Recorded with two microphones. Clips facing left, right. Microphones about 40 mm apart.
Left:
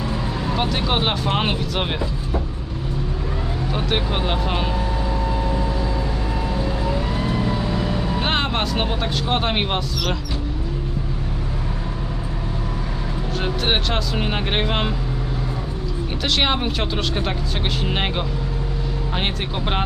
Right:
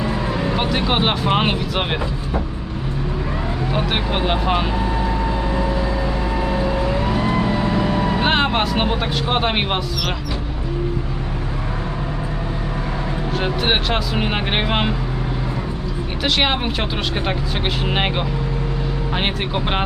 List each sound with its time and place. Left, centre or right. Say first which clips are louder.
0.0 s speech: right 4 dB; right
3.7 s speech: right 1 dB; centre
6.8 s vehicle: right 4 dB; right
8.2 s speech: right 3 dB; centre
13.4 s speech: right 2 dB; centre
16.2 s speech: right 2 dB; centre